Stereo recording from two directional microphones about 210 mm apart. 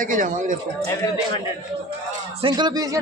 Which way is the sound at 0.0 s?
40° right (ahead or behind).